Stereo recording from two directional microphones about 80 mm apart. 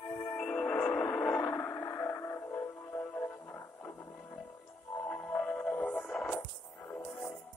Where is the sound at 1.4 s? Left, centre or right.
Left.